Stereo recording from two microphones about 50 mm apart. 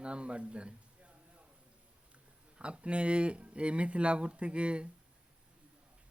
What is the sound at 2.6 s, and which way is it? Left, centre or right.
Speech, right.